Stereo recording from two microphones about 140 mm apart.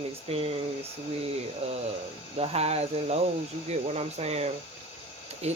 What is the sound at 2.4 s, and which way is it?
Speech, 45° right (ahead or behind).